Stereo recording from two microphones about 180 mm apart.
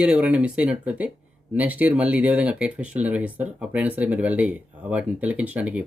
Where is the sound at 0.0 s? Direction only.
5° right (ahead or behind).